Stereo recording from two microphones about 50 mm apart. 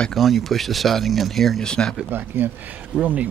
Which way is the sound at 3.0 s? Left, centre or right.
Right.